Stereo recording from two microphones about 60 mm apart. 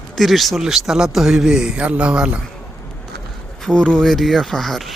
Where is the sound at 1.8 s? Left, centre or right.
Right.